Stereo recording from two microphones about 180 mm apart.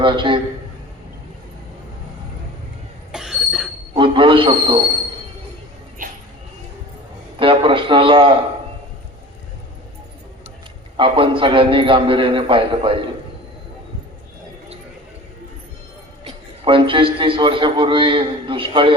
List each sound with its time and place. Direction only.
0.0 s a man's voice: 30° right (ahead or behind)
3.1 s train wheels squealing: 5° right (ahead or behind)
3.9 s a sound: 30° right (ahead or behind)
7.3 s a sound: 30° right (ahead or behind)
10.9 s a man's voice: 30° right (ahead or behind)
16.2 s a man's voice: 30° right (ahead or behind)